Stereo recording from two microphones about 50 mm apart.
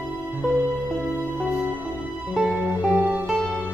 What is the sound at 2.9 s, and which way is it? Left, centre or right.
Music, right.